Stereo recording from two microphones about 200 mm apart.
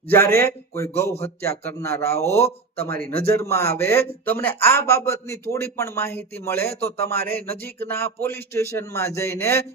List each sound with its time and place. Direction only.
0.3 s speech: 15° left (ahead or behind)
3.0 s a man's voice: 50° right (ahead or behind)
3.3 s speech: 15° left (ahead or behind)